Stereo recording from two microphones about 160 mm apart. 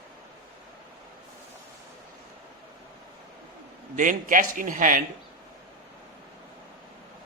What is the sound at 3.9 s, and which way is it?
A man's voice, 55° right (ahead or behind).